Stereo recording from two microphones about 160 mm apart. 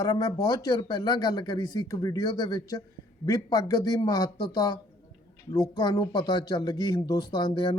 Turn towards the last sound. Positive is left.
turn(degrees=30)  # may be behind; listen again after turning